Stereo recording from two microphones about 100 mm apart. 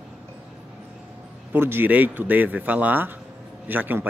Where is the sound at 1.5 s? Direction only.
20° right (ahead or behind).